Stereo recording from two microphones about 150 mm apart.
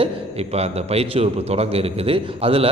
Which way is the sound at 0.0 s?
45° right (ahead or behind).